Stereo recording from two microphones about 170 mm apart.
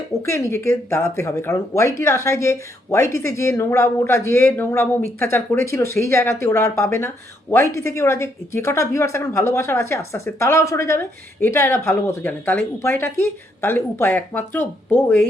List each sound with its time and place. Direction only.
0.2 s speech: 15° left (ahead or behind)